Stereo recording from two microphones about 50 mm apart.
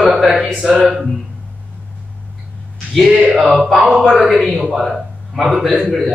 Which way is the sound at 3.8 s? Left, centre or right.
Centre.